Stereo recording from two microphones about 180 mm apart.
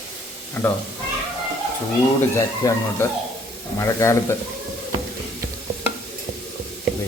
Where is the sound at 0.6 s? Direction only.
10° left (ahead or behind).